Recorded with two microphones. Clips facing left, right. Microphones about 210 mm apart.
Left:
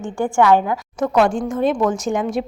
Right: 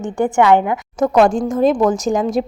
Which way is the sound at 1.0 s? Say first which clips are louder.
Right 4 dB; 40° right (ahead or behind).